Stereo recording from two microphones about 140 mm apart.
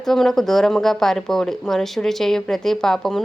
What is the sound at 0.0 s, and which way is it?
Speech, centre (ahead or behind).